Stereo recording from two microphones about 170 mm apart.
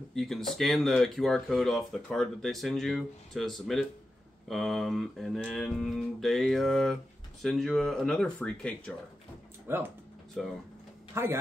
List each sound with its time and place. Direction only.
0.1 s speech: centre (ahead or behind)
9.7 s speech: 15° right (ahead or behind)
10.4 s speech: centre (ahead or behind)
11.1 s speech: 15° right (ahead or behind)